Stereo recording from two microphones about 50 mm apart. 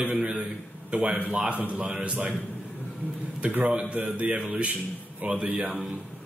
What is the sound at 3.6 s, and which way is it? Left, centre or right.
A man's voice, right.